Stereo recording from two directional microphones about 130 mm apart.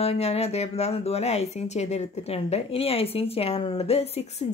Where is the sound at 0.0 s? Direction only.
50° left (ahead or behind).